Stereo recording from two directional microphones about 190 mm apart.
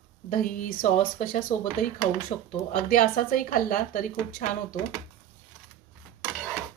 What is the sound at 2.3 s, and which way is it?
Speech, 25° left (ahead or behind).